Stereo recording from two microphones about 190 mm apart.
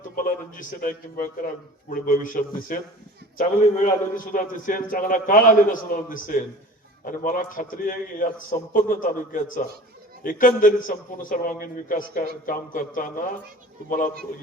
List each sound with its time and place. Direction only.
0.2 s a man's voice: 45° left (ahead or behind)